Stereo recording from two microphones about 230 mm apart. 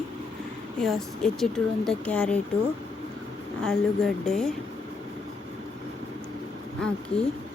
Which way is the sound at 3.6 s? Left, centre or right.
Centre.